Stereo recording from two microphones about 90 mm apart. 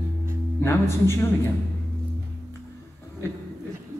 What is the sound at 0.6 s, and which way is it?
Speech, 30° left (ahead or behind).